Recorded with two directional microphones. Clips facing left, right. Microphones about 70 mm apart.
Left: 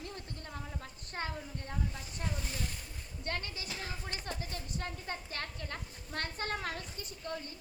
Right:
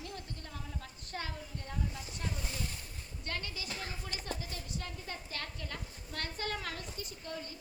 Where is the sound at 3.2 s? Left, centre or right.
Left.